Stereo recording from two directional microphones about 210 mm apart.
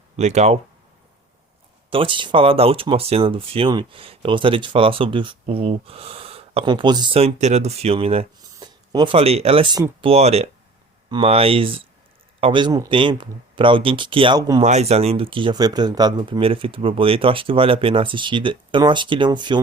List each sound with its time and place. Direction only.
0.2 s speech: 30° right (ahead or behind)
1.9 s speech: 25° right (ahead or behind)
14.6 s speech: 30° right (ahead or behind)